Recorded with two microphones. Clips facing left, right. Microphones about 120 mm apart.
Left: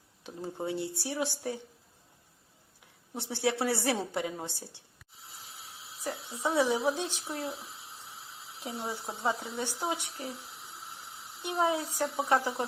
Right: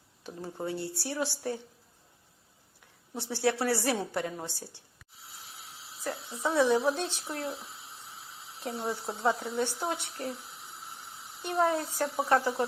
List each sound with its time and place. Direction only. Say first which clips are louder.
0.4 s speech: left 1 dB; 20° left (ahead or behind)
3.2 s speech: right 1 dB; 20° left (ahead or behind)
6.0 s speech: right 1 dB; 10° left (ahead or behind)
8.6 s speech: right 3 dB; 5° left (ahead or behind)
11.4 s speech: right 2 dB; 10° left (ahead or behind)